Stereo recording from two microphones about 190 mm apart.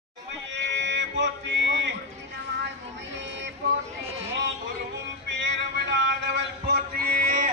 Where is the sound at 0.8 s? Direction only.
65° right (ahead or behind).